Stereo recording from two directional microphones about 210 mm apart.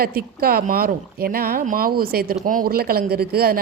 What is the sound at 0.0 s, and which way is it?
A woman's voice, 45° right (ahead or behind).